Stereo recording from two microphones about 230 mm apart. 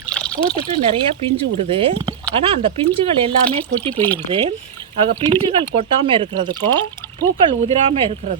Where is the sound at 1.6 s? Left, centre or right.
Right.